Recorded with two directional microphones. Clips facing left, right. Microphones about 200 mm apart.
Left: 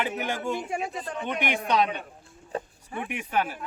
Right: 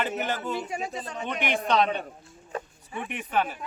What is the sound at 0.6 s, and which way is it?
Speech, 55° left (ahead or behind).